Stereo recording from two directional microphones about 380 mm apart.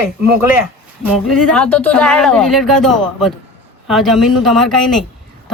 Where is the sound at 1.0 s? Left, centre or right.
Centre.